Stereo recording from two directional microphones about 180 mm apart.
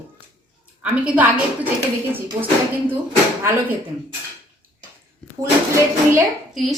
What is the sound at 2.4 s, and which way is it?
Speech, 20° right (ahead or behind).